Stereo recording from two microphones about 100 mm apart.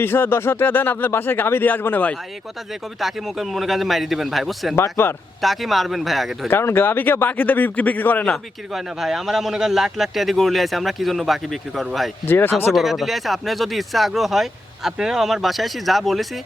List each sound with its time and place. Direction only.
0.0 s speech: 25° left (ahead or behind)
3.0 s speech: centre (ahead or behind)
4.7 s speech: 25° left (ahead or behind)
5.4 s speech: centre (ahead or behind)
6.5 s speech: 25° left (ahead or behind)
8.7 s speech: 5° right (ahead or behind)
12.2 s speech: 20° left (ahead or behind)
12.7 s speech: centre (ahead or behind)